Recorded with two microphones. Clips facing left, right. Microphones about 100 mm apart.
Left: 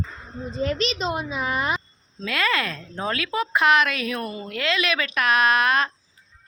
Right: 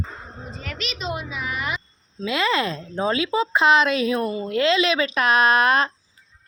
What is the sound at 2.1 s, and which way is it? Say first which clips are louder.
A woman's voice: right 3 dB; 20° right (ahead or behind).